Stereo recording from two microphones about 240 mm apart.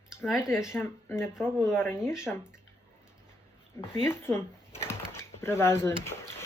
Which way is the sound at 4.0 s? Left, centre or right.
Centre.